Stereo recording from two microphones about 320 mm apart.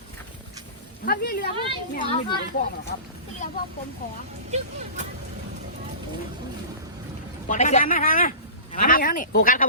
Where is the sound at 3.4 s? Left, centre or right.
Left.